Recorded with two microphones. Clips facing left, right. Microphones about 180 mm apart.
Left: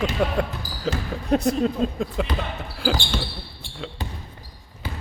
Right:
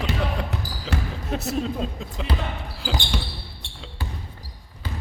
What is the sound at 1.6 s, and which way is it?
Speech, 55° left (ahead or behind).